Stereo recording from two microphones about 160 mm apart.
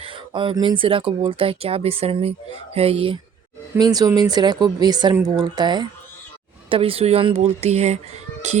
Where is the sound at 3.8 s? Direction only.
25° right (ahead or behind).